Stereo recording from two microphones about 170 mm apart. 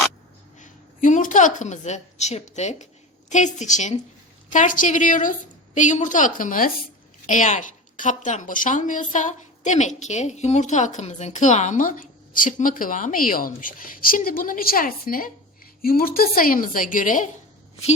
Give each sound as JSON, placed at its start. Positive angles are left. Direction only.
{"t": 0.6, "sound": "a woman's voice", "side_deg": 50}